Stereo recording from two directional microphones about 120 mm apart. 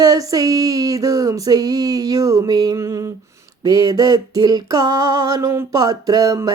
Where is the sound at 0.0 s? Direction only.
30° right (ahead or behind).